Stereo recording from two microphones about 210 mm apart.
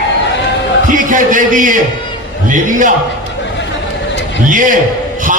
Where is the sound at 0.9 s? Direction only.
40° right (ahead or behind).